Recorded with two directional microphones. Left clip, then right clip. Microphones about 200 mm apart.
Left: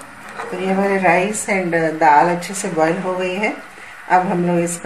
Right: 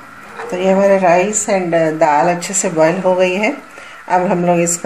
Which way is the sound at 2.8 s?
55° right (ahead or behind).